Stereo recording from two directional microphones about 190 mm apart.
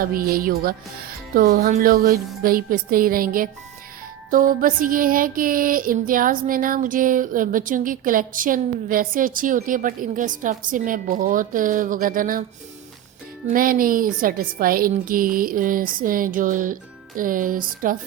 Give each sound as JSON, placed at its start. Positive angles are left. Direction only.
{"t": 0.0, "sound": "music", "side_deg": -50}
{"t": 13.5, "sound": "music", "side_deg": -45}